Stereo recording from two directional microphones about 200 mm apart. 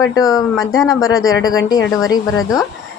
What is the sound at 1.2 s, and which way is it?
Speech, 90° left.